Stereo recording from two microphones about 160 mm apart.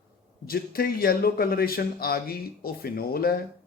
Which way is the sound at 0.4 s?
70° left (ahead or behind).